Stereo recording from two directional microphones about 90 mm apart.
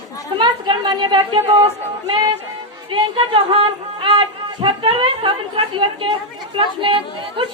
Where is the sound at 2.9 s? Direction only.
85° right.